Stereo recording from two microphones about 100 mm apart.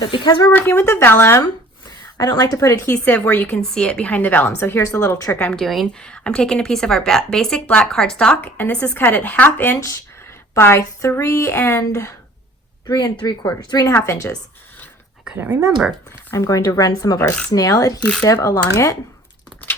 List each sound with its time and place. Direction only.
0.0 s speech: 50° left (ahead or behind)
0.5 s a woman's voice: 20° left (ahead or behind)
2.4 s speech: 35° left (ahead or behind)
2.8 s a woman's voice: 15° left (ahead or behind)
5.4 s speech: 15° left (ahead or behind)
10.5 s a woman's voice: 30° left (ahead or behind)
12.9 s a woman's voice: 45° left (ahead or behind)
15.8 s speech: 5° right (ahead or behind)
16.3 s a woman's voice: 30° left (ahead or behind)